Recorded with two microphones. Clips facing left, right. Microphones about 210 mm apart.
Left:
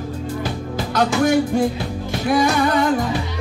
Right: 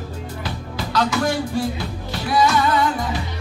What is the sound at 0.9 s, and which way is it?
Music, 50° left (ahead or behind).